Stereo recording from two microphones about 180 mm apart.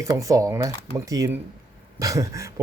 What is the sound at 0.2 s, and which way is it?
Speech, 20° right (ahead or behind).